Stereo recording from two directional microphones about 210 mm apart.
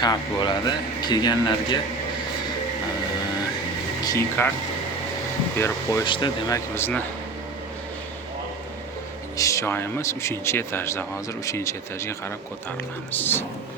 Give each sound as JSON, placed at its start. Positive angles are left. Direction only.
{"t": 0.0, "sound": "speech", "side_deg": 20}
{"t": 4.0, "sound": "speech", "side_deg": 10}
{"t": 5.5, "sound": "speech", "side_deg": 15}
{"t": 6.7, "sound": "speech", "side_deg": 10}
{"t": 9.4, "sound": "speech", "side_deg": 15}